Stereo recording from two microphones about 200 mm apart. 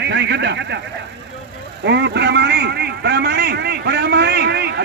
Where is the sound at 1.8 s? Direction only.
60° right (ahead or behind).